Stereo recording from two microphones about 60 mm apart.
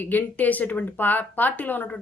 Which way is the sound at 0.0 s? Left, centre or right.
Left.